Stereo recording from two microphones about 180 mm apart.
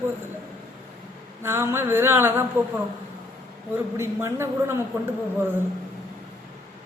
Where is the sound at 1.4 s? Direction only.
15° right (ahead or behind).